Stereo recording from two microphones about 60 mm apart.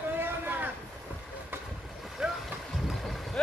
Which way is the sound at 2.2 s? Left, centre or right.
Centre.